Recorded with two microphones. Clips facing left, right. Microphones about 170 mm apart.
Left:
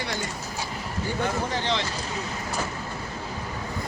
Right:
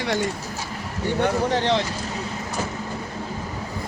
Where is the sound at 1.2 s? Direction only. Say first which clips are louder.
Right 7 dB; 65° right (ahead or behind).